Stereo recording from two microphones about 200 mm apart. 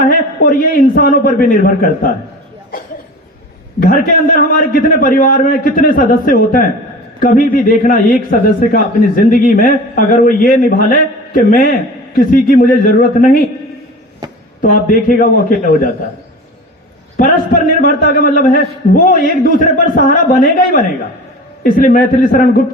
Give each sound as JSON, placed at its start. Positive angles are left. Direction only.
{"t": 0.1, "sound": "a man's voice", "side_deg": 45}
{"t": 3.8, "sound": "a man's voice", "side_deg": 45}
{"t": 14.6, "sound": "a man's voice", "side_deg": 45}
{"t": 17.2, "sound": "a man's voice", "side_deg": 45}
{"t": 21.6, "sound": "a man's voice", "side_deg": 45}